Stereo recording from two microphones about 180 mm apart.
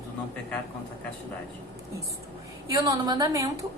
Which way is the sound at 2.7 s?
20° right (ahead or behind).